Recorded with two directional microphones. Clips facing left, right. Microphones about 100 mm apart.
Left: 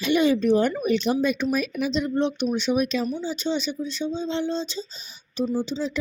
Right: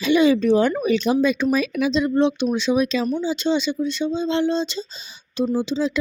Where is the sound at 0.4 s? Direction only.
90° right.